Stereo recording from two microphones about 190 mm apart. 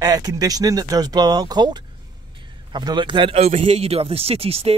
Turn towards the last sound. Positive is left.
turn(degrees=-30)  # may be behind; listen again after turning